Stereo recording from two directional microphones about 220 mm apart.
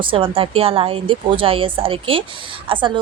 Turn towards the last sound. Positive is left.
turn(degrees=-20)  # may be behind; listen again after turning